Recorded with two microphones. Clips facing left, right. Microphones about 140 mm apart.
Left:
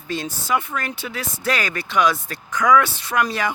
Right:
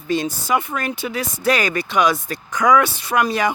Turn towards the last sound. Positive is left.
turn(degrees=-15)  # may be behind; listen again after turning